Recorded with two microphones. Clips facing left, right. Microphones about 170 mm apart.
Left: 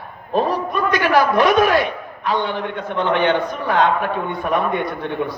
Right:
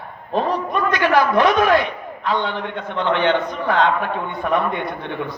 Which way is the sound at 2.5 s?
20° right (ahead or behind).